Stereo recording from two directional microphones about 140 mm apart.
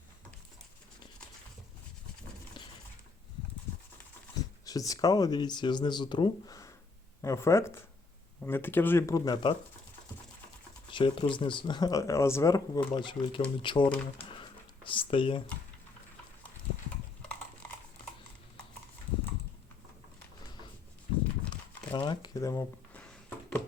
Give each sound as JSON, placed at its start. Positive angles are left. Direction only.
{"t": 4.4, "sound": "speech", "side_deg": 25}
{"t": 7.2, "sound": "speech", "side_deg": 20}
{"t": 10.8, "sound": "speech", "side_deg": 35}
{"t": 12.9, "sound": "speech", "side_deg": 35}
{"t": 14.3, "sound": "a sound", "side_deg": 35}
{"t": 21.9, "sound": "shuffling cards", "side_deg": 35}
{"t": 23.0, "sound": "a sound", "side_deg": 10}